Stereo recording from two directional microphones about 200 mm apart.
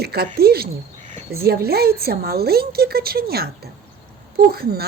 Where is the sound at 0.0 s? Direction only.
50° right (ahead or behind).